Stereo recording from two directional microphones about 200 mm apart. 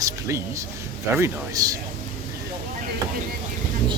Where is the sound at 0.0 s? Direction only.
15° right (ahead or behind).